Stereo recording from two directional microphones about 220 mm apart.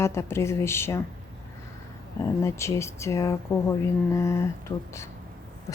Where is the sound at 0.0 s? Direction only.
10° left (ahead or behind).